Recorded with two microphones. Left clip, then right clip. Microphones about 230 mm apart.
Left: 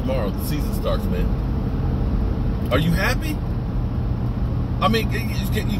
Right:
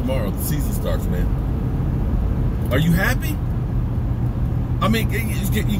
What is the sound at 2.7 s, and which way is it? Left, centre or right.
Speech, centre.